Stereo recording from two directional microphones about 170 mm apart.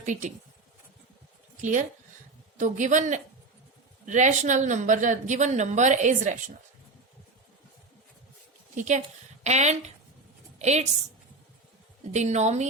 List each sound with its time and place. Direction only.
0.0 s a woman's voice: 45° right (ahead or behind)
2.6 s a woman's voice: 45° right (ahead or behind)
8.7 s a woman's voice: 45° right (ahead or behind)
12.1 s a woman's voice: 40° right (ahead or behind)